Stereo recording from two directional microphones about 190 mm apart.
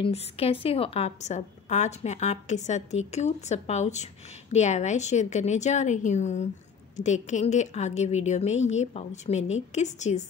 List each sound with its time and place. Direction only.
0.0 s a woman's voice: 30° left (ahead or behind)